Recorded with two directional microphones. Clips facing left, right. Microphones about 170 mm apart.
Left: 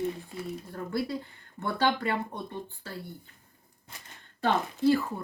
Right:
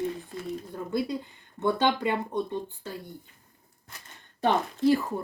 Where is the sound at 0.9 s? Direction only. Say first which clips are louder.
Right 2 dB; 20° right (ahead or behind).